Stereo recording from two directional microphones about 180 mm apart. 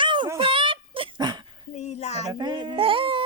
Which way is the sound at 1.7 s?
40° left (ahead or behind).